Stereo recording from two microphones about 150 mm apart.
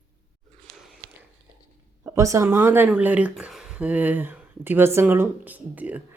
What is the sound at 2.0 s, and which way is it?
Speech, 20° right (ahead or behind).